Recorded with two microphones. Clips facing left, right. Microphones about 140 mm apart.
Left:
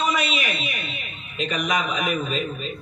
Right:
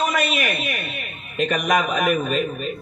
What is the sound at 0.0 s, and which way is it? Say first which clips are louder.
A man's voice: right 2 dB; 50° right (ahead or behind).